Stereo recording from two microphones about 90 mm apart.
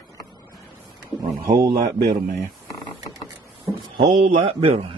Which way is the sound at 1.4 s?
45° right (ahead or behind).